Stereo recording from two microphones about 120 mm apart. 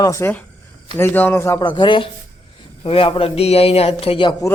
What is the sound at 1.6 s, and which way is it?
A man's voice, 40° left (ahead or behind).